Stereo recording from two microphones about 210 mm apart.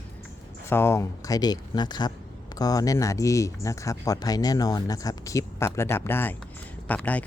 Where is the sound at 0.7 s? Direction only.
10° left (ahead or behind).